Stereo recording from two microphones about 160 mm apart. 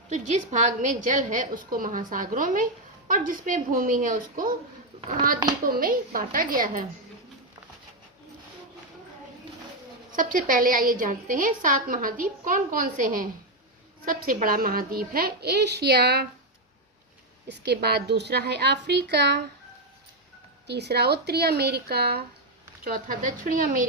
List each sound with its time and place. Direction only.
0.1 s a woman's voice: 50° right (ahead or behind)
5.6 s a woman's voice: 65° right (ahead or behind)
10.2 s a woman's voice: 60° right (ahead or behind); by 16.2 s 90° right
17.6 s a woman's voice: 90° right
20.7 s speech: 90° right
22.8 s a woman's voice: 60° right (ahead or behind)